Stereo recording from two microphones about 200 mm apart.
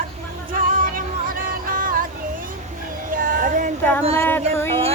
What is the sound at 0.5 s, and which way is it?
Music, 45° right (ahead or behind).